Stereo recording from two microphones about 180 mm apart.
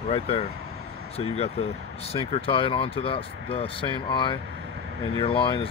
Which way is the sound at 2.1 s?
30° left (ahead or behind).